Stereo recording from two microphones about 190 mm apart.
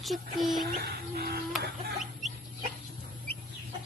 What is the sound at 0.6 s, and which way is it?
Bird, 50° right (ahead or behind).